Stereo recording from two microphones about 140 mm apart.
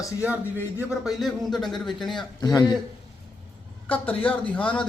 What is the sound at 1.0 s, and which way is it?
A man's voice, centre (ahead or behind).